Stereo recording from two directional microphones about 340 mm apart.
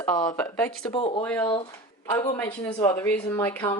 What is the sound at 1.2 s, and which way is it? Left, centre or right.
A woman's voice, centre.